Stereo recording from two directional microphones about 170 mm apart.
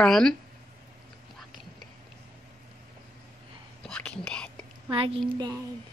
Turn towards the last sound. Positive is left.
turn(degrees=-25)  # may be behind; listen again after turning